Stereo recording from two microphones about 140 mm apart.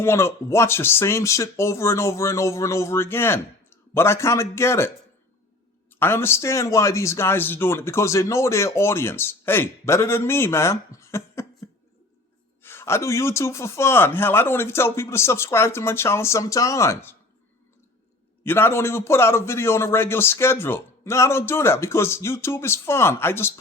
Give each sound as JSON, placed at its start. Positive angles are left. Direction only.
{"t": 0.0, "sound": "a man's voice", "side_deg": 20}
{"t": 5.9, "sound": "a man's voice", "side_deg": 15}
{"t": 12.6, "sound": "a man's voice", "side_deg": 20}
{"t": 18.4, "sound": "a man's voice", "side_deg": 15}